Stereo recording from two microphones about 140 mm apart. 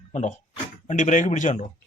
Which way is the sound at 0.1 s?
55° left (ahead or behind).